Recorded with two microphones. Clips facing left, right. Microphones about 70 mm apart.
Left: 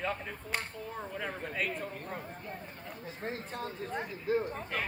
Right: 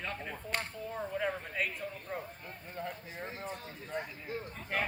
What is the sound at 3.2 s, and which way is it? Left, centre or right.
Speech, left.